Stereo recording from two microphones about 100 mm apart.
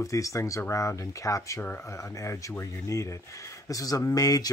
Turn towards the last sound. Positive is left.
turn(degrees=35)  # may be behind; listen again after turning